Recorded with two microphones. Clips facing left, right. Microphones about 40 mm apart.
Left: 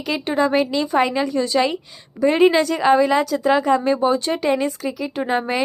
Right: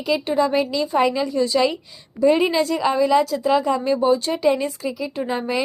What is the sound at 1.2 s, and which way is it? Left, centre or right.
Speech, left.